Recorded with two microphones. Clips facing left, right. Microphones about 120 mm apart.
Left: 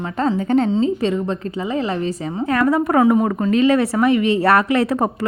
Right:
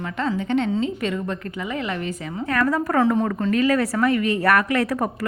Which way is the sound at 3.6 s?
25° left (ahead or behind).